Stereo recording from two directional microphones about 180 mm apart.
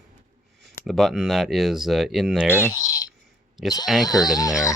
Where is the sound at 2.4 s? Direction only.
10° left (ahead or behind).